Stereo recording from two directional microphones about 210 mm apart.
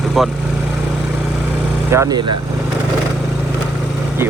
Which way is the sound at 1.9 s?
15° right (ahead or behind).